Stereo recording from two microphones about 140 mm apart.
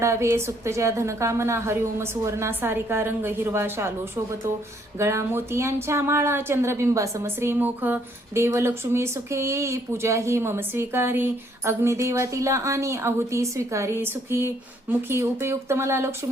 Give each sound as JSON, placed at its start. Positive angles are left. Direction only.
{"t": 0.0, "sound": "speech", "side_deg": -20}
{"t": 4.9, "sound": "speech", "side_deg": -20}